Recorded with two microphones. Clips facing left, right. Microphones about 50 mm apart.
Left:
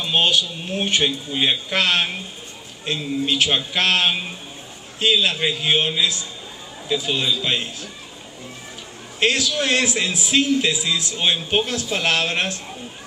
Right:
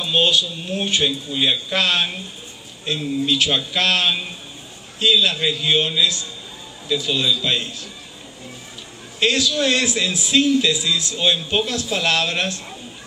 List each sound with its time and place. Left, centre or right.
0.0 s speech: left
1.7 s speech: left
3.3 s a man's voice: left
9.2 s speech: left